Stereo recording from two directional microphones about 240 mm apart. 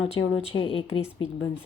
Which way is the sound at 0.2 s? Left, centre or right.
Left.